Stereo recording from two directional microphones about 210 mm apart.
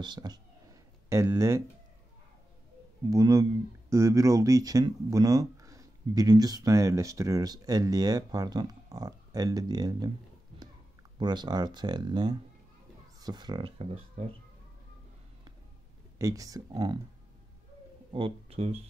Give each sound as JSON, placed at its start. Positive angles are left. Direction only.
{"t": 0.0, "sound": "speech", "side_deg": -20}
{"t": 3.1, "sound": "speech", "side_deg": -15}
{"t": 11.1, "sound": "speech", "side_deg": -20}
{"t": 16.2, "sound": "speech", "side_deg": -15}
{"t": 18.1, "sound": "speech", "side_deg": -25}